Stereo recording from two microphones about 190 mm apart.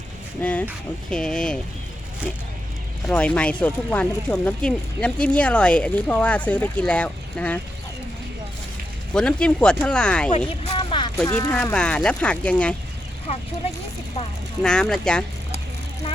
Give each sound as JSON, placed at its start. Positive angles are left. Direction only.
{"t": 0.4, "sound": "speech", "side_deg": 10}
{"t": 3.1, "sound": "speech", "side_deg": 5}
{"t": 9.1, "sound": "speech", "side_deg": 5}
{"t": 10.2, "sound": "speech", "side_deg": 35}
{"t": 11.3, "sound": "speech", "side_deg": 15}
{"t": 14.6, "sound": "speech", "side_deg": 5}